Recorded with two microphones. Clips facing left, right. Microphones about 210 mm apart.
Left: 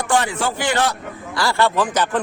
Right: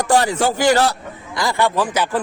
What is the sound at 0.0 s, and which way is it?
Speech, 40° right (ahead or behind).